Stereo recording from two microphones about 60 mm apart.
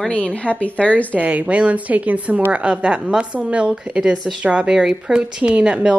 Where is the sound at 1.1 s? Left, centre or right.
Right.